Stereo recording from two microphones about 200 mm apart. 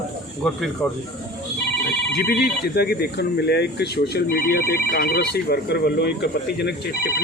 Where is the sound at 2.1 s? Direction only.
50° left (ahead or behind).